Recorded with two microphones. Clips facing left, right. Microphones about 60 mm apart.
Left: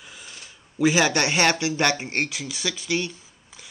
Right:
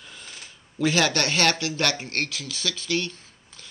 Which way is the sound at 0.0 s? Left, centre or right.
Centre.